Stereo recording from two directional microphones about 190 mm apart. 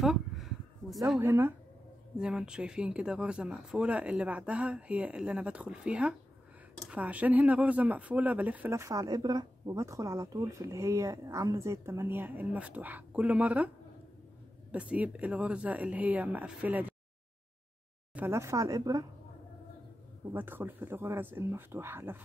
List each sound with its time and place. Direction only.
0.0 s a sound: centre (ahead or behind)
1.2 s speech: 10° right (ahead or behind)
14.7 s speech: 5° right (ahead or behind)
18.1 s speech: 10° right (ahead or behind)
20.3 s speech: 10° right (ahead or behind)